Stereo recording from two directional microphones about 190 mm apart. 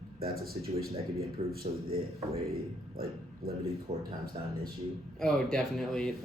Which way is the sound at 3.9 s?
35° right (ahead or behind).